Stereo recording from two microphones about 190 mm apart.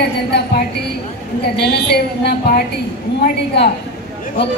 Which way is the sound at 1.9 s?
55° left (ahead or behind).